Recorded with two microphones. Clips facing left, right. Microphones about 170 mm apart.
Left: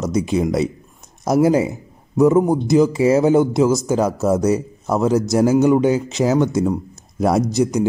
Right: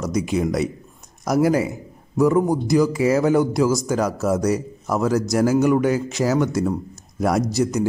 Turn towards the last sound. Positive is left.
turn(degrees=20)  # may be behind; listen again after turning